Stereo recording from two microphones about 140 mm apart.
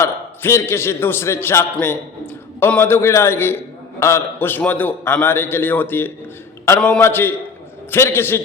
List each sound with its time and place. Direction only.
0.0 s a man's voice: 20° left (ahead or behind)